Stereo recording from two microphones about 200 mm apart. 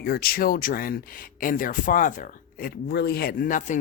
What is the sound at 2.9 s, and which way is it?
Speech, 55° left (ahead or behind).